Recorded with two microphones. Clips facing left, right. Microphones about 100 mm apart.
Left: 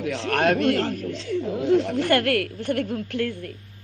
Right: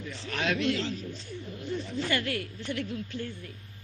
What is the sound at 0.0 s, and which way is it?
Speech, 70° left (ahead or behind).